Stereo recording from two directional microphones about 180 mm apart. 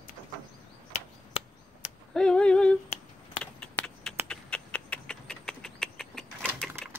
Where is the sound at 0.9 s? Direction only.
35° left (ahead or behind).